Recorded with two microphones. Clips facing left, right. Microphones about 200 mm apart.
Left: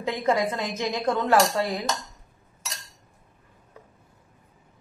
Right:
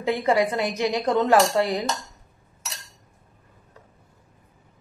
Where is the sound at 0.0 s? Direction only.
15° right (ahead or behind).